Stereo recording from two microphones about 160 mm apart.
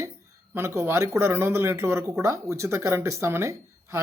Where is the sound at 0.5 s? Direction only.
15° right (ahead or behind).